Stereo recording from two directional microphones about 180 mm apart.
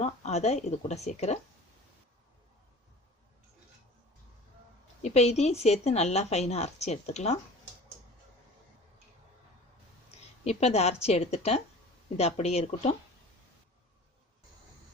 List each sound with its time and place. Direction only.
0.0 s a woman's voice: 40° left (ahead or behind)
5.0 s a woman's voice: 35° left (ahead or behind)
10.4 s a woman's voice: 35° left (ahead or behind)